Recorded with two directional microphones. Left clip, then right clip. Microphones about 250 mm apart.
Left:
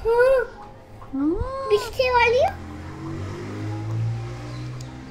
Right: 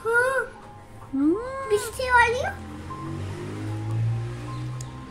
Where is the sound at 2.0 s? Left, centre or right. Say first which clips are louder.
Right 1 dB; right.